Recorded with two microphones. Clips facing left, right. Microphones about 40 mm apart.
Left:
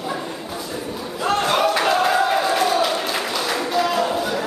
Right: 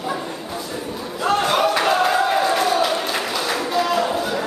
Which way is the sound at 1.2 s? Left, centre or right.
Centre.